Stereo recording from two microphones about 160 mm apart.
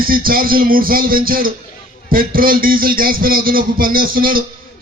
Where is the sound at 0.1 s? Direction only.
65° right (ahead or behind).